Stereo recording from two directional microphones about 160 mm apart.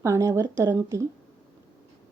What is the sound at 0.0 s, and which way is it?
Speech, 20° right (ahead or behind).